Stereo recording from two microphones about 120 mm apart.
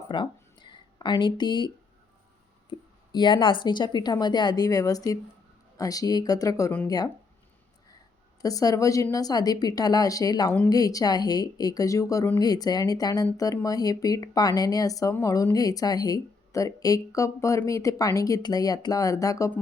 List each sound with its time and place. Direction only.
0.1 s a sound: 40° left (ahead or behind)
2.6 s speech: 40° left (ahead or behind)
8.4 s speech: 30° left (ahead or behind)